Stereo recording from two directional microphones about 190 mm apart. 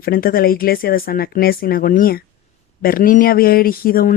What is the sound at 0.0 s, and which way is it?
Speech, 50° left (ahead or behind).